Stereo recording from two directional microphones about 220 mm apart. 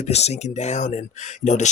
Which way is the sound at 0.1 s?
30° left (ahead or behind).